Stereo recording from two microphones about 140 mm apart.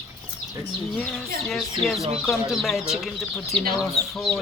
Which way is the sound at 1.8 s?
Centre (ahead or behind).